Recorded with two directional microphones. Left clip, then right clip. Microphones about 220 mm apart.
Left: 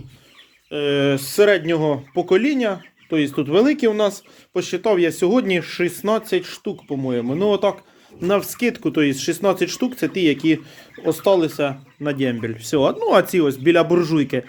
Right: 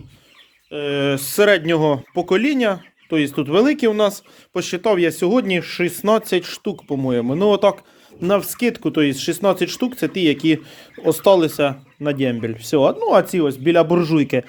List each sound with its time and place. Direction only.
0.7 s speech: 10° left (ahead or behind)
1.1 s speech: 20° right (ahead or behind)